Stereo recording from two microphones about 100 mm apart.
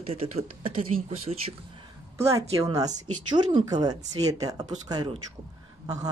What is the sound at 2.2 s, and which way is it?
Speech, 30° right (ahead or behind).